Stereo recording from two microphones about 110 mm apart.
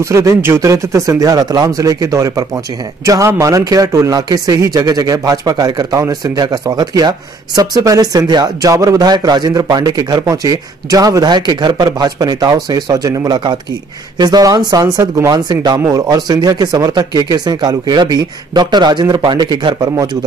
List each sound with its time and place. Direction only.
0.0 s speech: 25° right (ahead or behind)